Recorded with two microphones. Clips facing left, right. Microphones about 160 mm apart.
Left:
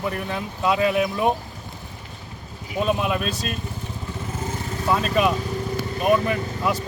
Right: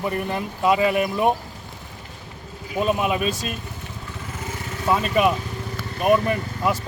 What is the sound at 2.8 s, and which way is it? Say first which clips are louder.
Speech: right 1 dB; 5° right (ahead or behind).